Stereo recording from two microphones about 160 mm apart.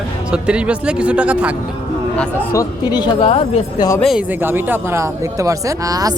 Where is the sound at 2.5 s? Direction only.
20° left (ahead or behind).